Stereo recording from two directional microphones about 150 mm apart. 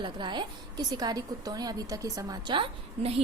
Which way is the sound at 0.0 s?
30° right (ahead or behind).